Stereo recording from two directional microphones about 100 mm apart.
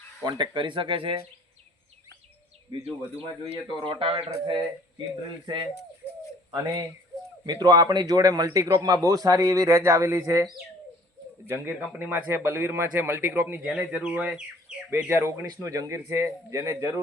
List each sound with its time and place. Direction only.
0.3 s speech: 50° right (ahead or behind)
3.8 s speech: 60° right (ahead or behind)
6.5 s a man's voice: 40° right (ahead or behind)
11.4 s speech: 25° right (ahead or behind)
15.1 s a man's voice: 25° right (ahead or behind)